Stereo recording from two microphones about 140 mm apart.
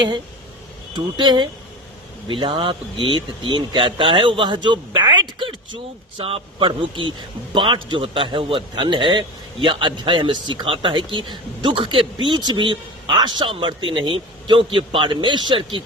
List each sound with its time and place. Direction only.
0.9 s speech: 35° right (ahead or behind)
4.9 s a sound: 35° right (ahead or behind)
6.1 s speech: 40° right (ahead or behind)